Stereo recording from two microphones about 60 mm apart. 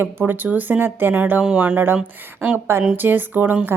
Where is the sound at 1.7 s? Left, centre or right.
Right.